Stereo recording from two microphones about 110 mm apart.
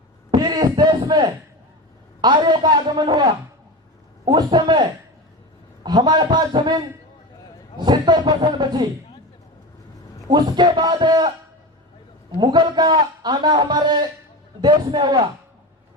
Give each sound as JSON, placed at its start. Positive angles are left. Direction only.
{"t": 0.3, "sound": "a sound", "side_deg": -40}
{"t": 2.2, "sound": "a man's voice", "side_deg": -40}
{"t": 4.3, "sound": "a man's voice", "side_deg": -40}
{"t": 10.2, "sound": "a man's voice", "side_deg": -40}
{"t": 12.4, "sound": "a man's voice", "side_deg": -40}